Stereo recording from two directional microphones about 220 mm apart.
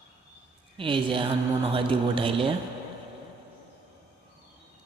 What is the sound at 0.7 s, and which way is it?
Speech, 25° right (ahead or behind).